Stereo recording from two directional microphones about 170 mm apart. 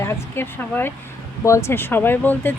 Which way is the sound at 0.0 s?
15° left (ahead or behind).